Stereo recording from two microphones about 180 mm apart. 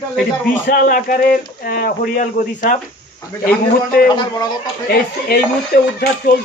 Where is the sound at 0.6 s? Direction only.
50° left (ahead or behind).